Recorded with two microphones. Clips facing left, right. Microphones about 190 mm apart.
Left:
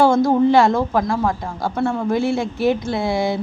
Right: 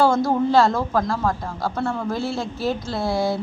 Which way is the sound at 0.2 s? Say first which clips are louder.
Left 4 dB; 15° left (ahead or behind).